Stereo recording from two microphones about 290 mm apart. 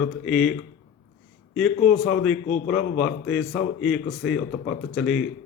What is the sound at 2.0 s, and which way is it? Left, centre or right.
Speech, centre.